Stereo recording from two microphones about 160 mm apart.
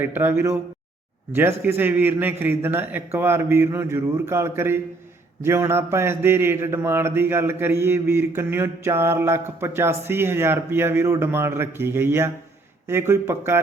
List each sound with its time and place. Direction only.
0.0 s a man's voice: 15° right (ahead or behind)